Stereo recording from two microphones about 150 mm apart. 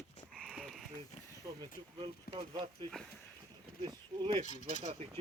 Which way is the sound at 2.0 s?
30° right (ahead or behind).